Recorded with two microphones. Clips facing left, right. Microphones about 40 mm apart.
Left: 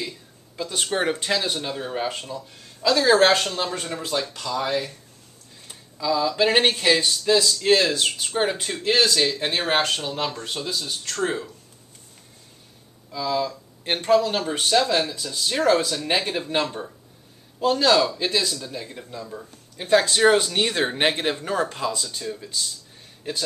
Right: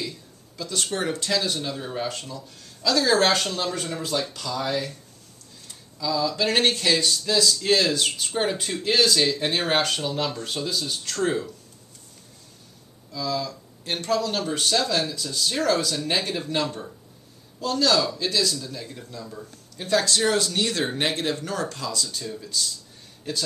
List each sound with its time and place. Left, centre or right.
0.6 s speech: left
13.1 s speech: left